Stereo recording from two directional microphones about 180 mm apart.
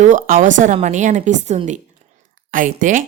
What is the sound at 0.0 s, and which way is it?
A woman's voice, 45° right (ahead or behind).